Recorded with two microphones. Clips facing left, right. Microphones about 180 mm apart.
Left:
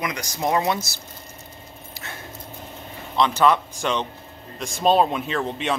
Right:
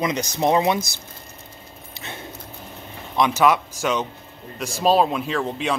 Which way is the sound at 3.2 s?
10° right (ahead or behind).